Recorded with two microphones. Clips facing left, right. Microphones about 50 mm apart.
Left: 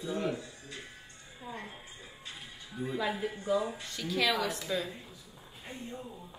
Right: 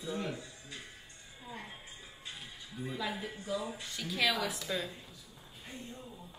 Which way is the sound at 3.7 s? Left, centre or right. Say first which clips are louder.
Left 4 dB; centre.